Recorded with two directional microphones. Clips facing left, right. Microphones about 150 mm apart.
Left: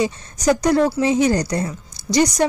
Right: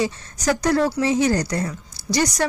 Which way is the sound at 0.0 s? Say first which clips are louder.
Left 3 dB; 20° left (ahead or behind).